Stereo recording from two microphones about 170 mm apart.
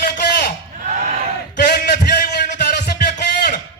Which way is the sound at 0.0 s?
65° left (ahead or behind).